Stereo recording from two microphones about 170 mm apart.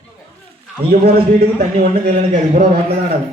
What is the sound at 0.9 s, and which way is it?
Speech, 65° right (ahead or behind).